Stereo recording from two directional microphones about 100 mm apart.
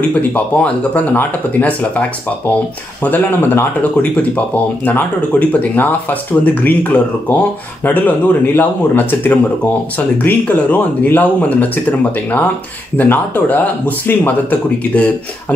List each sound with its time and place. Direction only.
0.3 s speech: 15° left (ahead or behind)
5.5 s speech: 15° left (ahead or behind)